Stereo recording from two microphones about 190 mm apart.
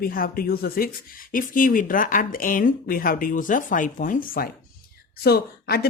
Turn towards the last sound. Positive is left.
turn(degrees=55)  # may be behind; listen again after turning